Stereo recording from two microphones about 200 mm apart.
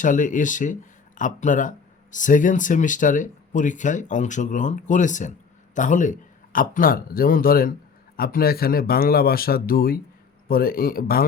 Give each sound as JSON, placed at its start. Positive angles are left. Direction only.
{"t": 0.0, "sound": "speech", "side_deg": 40}